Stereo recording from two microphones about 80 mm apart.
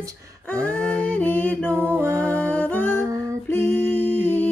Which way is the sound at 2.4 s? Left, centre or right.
Centre.